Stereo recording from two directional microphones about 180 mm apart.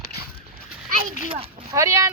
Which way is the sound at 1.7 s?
15° right (ahead or behind).